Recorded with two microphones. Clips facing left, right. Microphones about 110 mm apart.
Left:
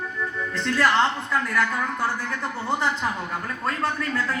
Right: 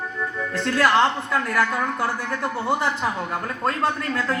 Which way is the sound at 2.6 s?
15° right (ahead or behind).